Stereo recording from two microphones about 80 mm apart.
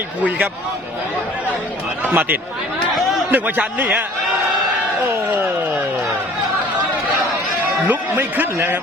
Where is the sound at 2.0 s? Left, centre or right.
Right.